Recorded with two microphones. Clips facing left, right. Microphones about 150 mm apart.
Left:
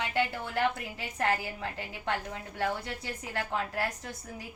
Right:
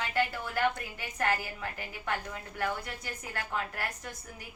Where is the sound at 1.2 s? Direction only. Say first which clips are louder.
Left 1 dB; 25° left (ahead or behind).